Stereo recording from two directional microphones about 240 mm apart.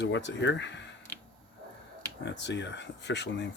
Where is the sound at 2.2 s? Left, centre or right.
Left.